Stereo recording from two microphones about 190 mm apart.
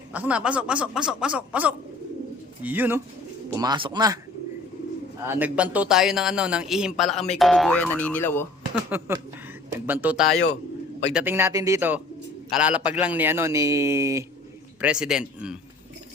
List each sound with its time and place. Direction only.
0.1 s a man's voice: 5° right (ahead or behind)
3.5 s speech: 20° right (ahead or behind)
5.2 s a man's voice: 10° right (ahead or behind); by 8.4 s 10° left (ahead or behind)
8.7 s a man's voice: 10° right (ahead or behind)
14.8 s a man's voice: 5° right (ahead or behind)